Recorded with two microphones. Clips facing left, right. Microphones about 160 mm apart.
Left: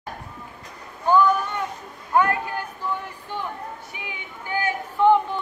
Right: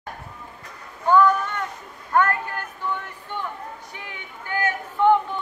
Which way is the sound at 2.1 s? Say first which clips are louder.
Even; 10° left (ahead or behind).